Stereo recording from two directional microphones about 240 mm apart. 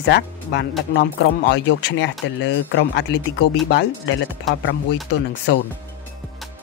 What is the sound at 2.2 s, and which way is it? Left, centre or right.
Speech, left.